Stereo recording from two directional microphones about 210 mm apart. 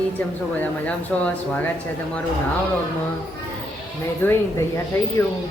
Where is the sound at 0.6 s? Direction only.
5° left (ahead or behind).